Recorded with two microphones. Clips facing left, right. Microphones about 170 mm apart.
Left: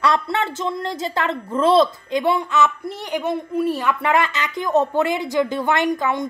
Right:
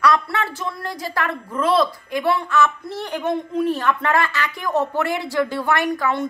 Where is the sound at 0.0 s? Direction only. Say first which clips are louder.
Even; 25° left (ahead or behind).